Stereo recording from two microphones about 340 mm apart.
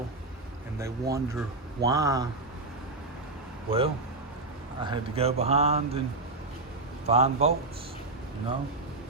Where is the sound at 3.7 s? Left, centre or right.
Centre.